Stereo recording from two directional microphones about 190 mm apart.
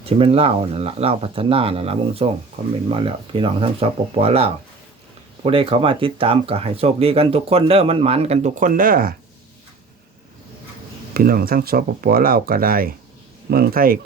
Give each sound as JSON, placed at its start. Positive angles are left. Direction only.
{"t": 0.0, "sound": "speech", "side_deg": -30}
{"t": 11.1, "sound": "speech", "side_deg": -50}